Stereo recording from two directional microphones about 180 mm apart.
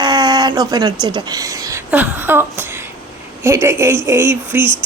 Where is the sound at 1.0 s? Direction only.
25° right (ahead or behind).